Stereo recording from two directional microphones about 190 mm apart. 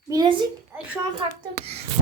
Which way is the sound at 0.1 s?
25° right (ahead or behind).